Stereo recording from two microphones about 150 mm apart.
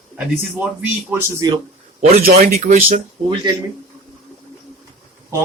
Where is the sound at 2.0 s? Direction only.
45° right (ahead or behind).